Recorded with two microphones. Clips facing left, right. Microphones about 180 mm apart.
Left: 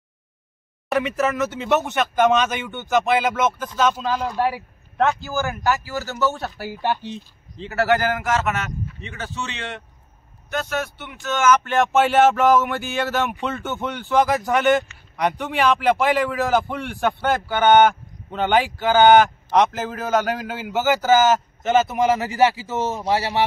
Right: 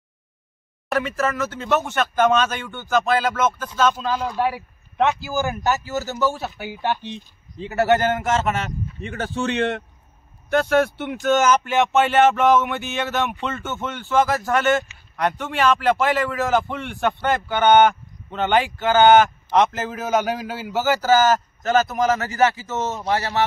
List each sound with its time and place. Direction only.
1.3 s a man's voice: 15° left (ahead or behind)
3.6 s a man's voice: 5° left (ahead or behind)
5.3 s speech: 20° right (ahead or behind); by 7.2 s 10° left (ahead or behind)
7.5 s a man's voice: 20° right (ahead or behind)
9.0 s speech: 50° right (ahead or behind)
11.6 s a man's voice: 5° right (ahead or behind)
13.6 s a man's voice: 15° left (ahead or behind)
16.3 s a man's voice: centre (ahead or behind)
19.9 s a man's voice: 10° right (ahead or behind); by 22.1 s 10° left (ahead or behind)
23.0 s speech: 25° left (ahead or behind)